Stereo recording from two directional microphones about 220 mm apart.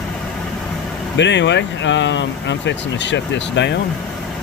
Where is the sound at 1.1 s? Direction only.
55° left (ahead or behind).